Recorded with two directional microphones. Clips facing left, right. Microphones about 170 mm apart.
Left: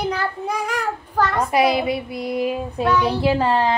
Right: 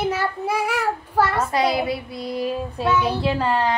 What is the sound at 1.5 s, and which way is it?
A woman's voice, 20° left (ahead or behind).